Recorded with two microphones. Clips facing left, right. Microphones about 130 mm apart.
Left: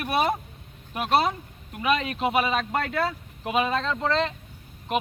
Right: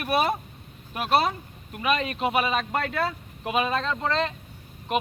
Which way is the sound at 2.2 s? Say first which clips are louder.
Left 1 dB; 20° left (ahead or behind).